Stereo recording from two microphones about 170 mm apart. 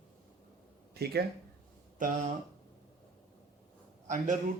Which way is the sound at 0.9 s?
70° right (ahead or behind).